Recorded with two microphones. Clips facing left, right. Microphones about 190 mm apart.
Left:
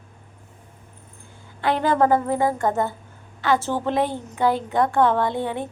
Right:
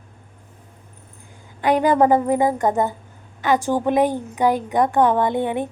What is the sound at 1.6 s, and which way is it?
A woman's voice, 15° right (ahead or behind).